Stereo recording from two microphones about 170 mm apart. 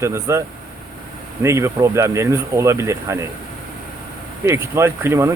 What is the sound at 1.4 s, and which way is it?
Speech, 15° right (ahead or behind).